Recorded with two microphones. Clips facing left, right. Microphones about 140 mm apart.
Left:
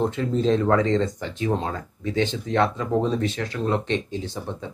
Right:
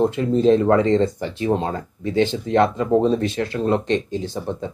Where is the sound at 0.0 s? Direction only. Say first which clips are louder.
Right 5 dB; 15° right (ahead or behind).